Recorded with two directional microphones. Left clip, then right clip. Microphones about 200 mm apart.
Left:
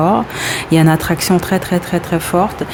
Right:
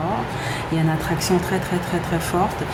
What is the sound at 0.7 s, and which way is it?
Speech, 40° left (ahead or behind).